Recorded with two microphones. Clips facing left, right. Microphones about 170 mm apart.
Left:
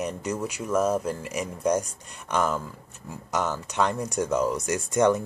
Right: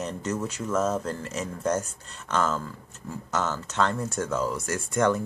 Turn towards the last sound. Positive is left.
turn(degrees=20)  # may be behind; listen again after turning